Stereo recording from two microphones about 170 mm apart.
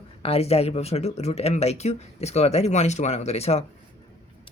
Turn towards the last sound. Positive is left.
turn(degrees=40)  # may be behind; listen again after turning